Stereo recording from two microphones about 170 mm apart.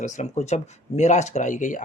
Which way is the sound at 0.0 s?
45° left (ahead or behind).